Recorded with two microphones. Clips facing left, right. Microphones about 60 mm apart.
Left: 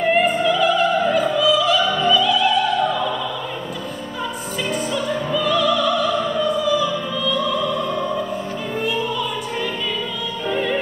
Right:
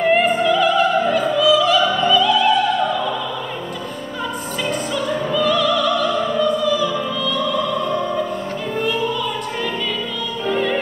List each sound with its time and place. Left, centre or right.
0.0 s opera: centre
4.6 s opera: centre
6.4 s music: centre
7.2 s opera: centre
10.4 s music: centre